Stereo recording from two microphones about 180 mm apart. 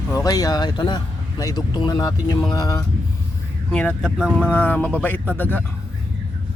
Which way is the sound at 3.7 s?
5° left (ahead or behind).